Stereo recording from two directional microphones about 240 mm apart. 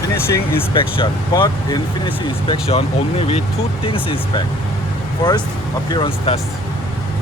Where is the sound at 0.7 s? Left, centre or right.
Left.